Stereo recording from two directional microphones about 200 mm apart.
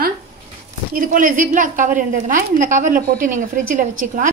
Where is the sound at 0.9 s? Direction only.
40° right (ahead or behind).